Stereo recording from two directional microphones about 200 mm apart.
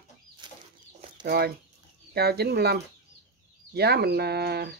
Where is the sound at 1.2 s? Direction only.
50° right (ahead or behind).